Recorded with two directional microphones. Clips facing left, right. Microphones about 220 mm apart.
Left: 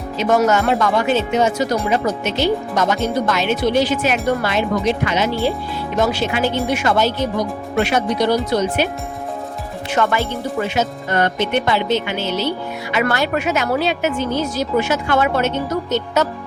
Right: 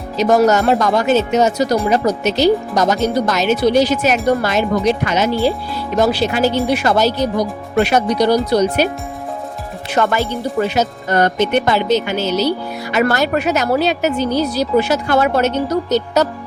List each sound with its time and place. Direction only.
0.2 s speech: 40° right (ahead or behind)